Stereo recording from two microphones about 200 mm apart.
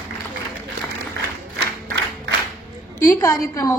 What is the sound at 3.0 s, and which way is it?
Speech, 15° left (ahead or behind).